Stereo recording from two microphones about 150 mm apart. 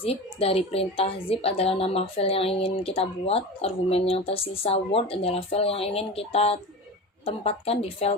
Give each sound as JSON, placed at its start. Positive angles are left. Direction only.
{"t": 0.0, "sound": "a woman's voice", "side_deg": 40}